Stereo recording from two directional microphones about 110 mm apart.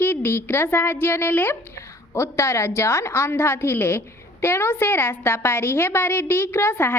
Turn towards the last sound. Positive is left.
turn(degrees=20)  # may be behind; listen again after turning